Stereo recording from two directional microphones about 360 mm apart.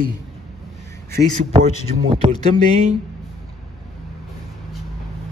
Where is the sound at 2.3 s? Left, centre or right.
Centre.